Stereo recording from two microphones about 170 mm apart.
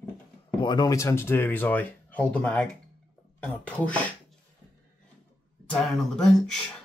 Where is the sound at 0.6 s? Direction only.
25° left (ahead or behind); by 4.0 s 10° left (ahead or behind).